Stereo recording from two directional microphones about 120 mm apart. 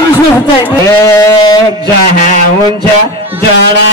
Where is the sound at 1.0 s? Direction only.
25° left (ahead or behind).